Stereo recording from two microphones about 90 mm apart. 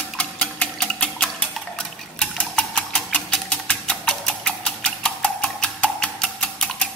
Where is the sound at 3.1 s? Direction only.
10° left (ahead or behind).